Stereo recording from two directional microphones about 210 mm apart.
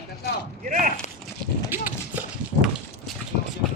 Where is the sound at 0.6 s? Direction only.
40° right (ahead or behind).